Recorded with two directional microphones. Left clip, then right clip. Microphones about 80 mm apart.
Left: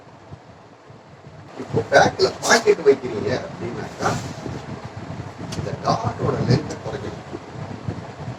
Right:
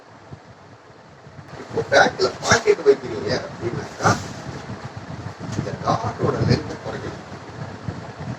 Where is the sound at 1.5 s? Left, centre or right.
Right.